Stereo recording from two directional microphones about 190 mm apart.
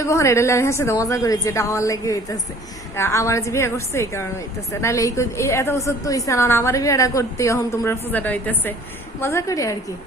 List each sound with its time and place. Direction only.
0.0 s a woman's voice: 15° left (ahead or behind)